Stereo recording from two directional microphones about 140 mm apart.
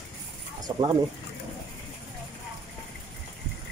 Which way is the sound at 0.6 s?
25° right (ahead or behind).